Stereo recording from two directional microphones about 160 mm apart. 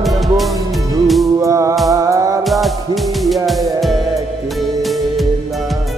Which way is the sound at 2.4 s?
Centre (ahead or behind).